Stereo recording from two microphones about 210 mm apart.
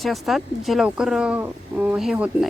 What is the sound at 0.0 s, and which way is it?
Speech, centre (ahead or behind).